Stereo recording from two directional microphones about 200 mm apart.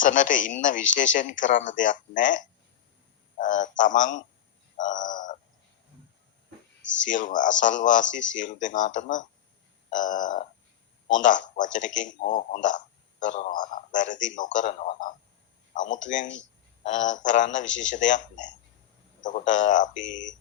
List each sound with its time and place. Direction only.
0.0 s speech: 40° left (ahead or behind)
4.8 s a sound: 40° left (ahead or behind)
7.0 s a man's voice: 40° left (ahead or behind)